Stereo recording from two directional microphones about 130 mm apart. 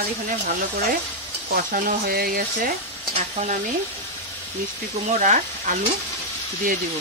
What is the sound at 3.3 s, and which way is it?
Speech, 70° right (ahead or behind).